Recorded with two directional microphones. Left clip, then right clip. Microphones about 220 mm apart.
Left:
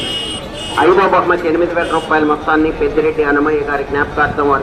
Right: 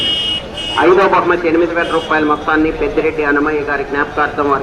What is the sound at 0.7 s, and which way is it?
A man's voice, 25° right (ahead or behind).